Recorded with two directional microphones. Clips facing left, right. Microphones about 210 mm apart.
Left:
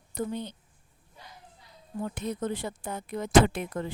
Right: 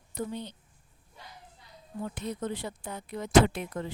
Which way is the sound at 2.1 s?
50° left (ahead or behind).